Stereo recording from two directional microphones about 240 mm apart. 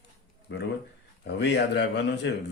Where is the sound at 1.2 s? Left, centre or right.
Left.